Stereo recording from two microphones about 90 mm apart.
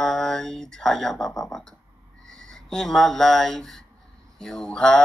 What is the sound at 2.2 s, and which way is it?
Speech, 5° left (ahead or behind).